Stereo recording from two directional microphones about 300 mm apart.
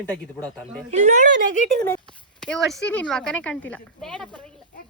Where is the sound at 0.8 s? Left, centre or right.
Right.